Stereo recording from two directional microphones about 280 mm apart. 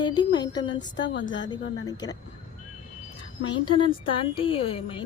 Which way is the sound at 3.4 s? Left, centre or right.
Left.